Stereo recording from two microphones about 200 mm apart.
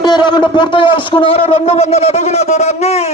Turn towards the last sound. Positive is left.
turn(degrees=30)  # may be behind; listen again after turning